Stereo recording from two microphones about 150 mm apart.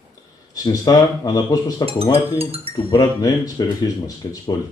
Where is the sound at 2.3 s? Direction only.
40° right (ahead or behind).